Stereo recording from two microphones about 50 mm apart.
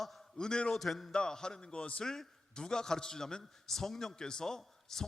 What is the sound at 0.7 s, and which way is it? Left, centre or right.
Speech, centre.